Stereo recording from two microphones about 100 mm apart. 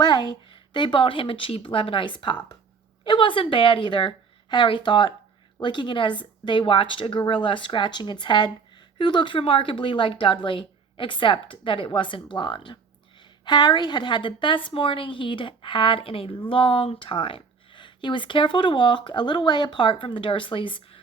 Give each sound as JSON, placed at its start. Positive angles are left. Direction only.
{"t": 0.0, "sound": "a woman's voice", "side_deg": 45}